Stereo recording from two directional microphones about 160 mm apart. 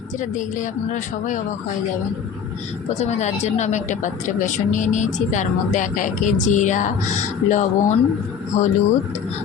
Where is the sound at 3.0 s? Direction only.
45° left (ahead or behind).